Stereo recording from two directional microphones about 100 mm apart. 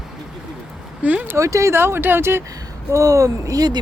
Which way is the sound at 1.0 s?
15° right (ahead or behind).